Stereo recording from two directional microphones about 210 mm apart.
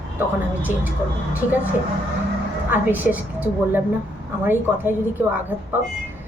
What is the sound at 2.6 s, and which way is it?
A woman's voice, 10° right (ahead or behind).